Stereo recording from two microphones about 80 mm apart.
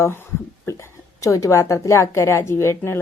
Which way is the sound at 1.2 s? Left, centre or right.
Left.